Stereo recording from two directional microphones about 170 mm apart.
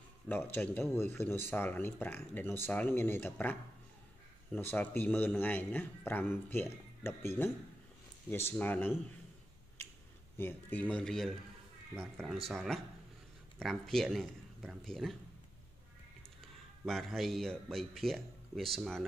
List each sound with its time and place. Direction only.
0.3 s a man's voice: 10° left (ahead or behind)
4.6 s a man's voice: 10° left (ahead or behind)
10.3 s a man's voice: 10° left (ahead or behind)
16.8 s a man's voice: centre (ahead or behind)